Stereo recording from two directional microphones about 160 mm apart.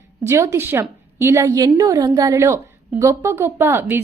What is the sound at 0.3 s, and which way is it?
A woman's voice, 15° right (ahead or behind).